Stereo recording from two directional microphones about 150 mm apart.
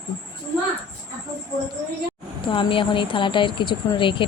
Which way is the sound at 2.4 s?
35° left (ahead or behind).